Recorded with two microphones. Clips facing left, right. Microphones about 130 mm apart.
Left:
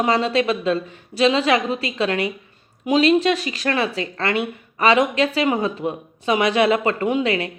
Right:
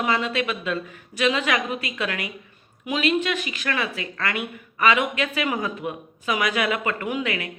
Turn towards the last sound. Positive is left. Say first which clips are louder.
# left 7 dB
turn(degrees=30)  # may be behind; listen again after turning